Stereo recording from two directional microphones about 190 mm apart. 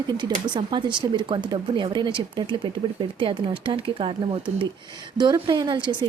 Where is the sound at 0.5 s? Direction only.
25° right (ahead or behind).